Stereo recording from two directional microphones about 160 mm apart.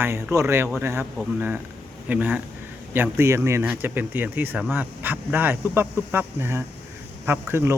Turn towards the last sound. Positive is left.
turn(degrees=-15)  # may be behind; listen again after turning